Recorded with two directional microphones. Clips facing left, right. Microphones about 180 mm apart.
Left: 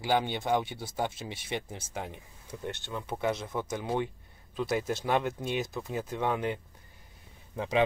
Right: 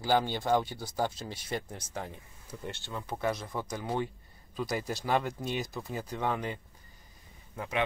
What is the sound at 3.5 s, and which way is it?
Speech, centre (ahead or behind).